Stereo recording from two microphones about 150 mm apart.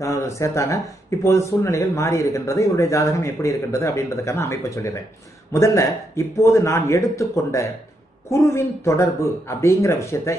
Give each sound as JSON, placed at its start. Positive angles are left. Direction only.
{"t": 0.0, "sound": "speech", "side_deg": 20}